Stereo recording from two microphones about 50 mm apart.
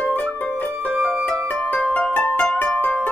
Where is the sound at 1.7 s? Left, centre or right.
Left.